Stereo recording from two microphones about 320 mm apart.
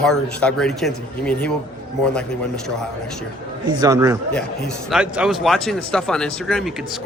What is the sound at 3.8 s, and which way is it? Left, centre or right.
Speech, centre.